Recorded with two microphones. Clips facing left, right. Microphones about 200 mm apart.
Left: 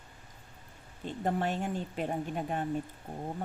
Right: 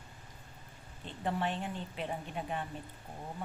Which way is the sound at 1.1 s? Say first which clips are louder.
Left 4 dB; 45° left (ahead or behind).